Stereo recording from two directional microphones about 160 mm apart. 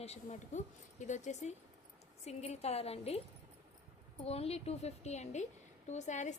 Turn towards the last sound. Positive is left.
turn(degrees=50)  # may be behind; listen again after turning